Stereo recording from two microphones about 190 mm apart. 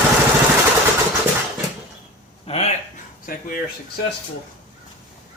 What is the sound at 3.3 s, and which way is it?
Speech, 45° left (ahead or behind).